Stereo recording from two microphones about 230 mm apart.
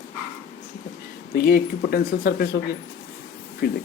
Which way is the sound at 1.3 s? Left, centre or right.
Left.